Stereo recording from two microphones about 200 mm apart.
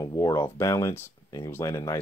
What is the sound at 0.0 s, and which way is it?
Speech, 15° left (ahead or behind).